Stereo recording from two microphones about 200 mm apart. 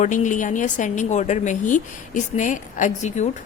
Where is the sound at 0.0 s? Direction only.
40° left (ahead or behind).